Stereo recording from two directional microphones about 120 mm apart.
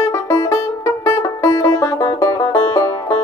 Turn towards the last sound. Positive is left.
turn(degrees=25)  # may be behind; listen again after turning